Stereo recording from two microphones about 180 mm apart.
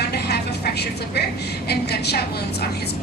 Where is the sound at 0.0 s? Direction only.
60° left (ahead or behind).